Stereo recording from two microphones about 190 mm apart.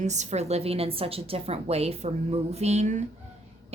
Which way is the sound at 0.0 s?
40° right (ahead or behind).